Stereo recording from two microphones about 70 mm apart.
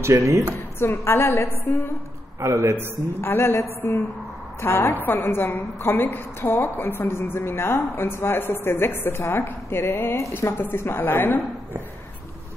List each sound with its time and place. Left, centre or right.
0.0 s a woman's voice: right
0.7 s a woman's voice: left
2.4 s a man's voice: right
3.2 s a woman's voice: left